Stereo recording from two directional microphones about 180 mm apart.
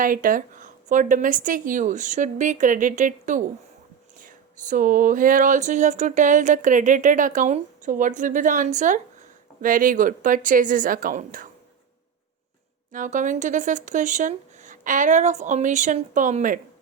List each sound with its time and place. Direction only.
0.0 s speech: 50° right (ahead or behind)
12.9 s speech: 45° right (ahead or behind)